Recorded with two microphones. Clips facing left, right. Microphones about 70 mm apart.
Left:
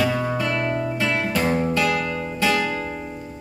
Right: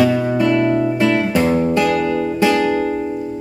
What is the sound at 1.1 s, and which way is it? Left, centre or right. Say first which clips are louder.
Music: right 7 dB; right.